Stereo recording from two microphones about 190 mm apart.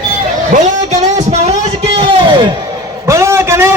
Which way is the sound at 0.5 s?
40° right (ahead or behind).